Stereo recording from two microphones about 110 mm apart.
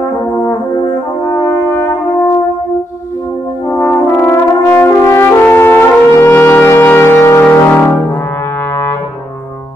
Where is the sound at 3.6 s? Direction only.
25° left (ahead or behind).